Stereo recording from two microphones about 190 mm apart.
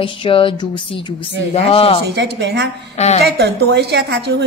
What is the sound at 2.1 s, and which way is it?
Speech, 60° right (ahead or behind).